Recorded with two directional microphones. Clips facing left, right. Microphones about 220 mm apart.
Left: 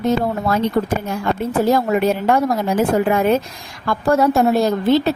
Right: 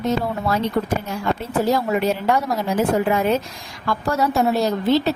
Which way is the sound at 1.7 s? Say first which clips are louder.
Left 3 dB; 50° left (ahead or behind).